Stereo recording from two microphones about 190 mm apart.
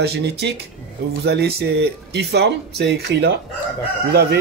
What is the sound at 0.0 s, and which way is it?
Speech, 60° right (ahead or behind).